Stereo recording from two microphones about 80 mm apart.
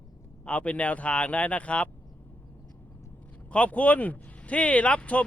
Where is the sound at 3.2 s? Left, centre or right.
Centre.